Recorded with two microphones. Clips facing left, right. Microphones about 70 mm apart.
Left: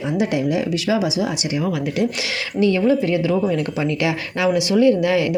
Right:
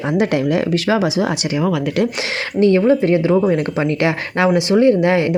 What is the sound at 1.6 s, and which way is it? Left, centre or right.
Speech, right.